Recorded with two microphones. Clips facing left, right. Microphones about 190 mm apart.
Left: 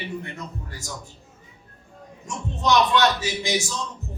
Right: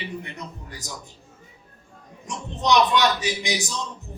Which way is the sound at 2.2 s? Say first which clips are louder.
Left 1 dB; 15° right (ahead or behind).